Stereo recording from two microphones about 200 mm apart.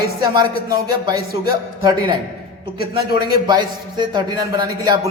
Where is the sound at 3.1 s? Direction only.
20° right (ahead or behind).